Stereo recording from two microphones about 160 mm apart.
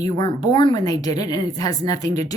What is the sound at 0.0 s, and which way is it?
A woman's voice, 25° left (ahead or behind).